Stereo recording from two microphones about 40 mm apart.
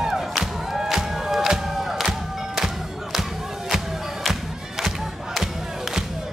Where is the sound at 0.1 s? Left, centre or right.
Centre.